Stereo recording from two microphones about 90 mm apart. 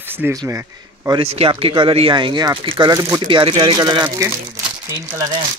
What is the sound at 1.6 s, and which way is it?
Speech, 65° right (ahead or behind).